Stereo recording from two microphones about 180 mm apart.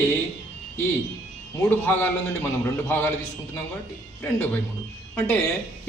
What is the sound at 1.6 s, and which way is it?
A man's voice, 10° left (ahead or behind).